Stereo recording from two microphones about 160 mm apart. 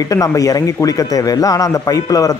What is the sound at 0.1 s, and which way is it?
A man's voice, 20° left (ahead or behind).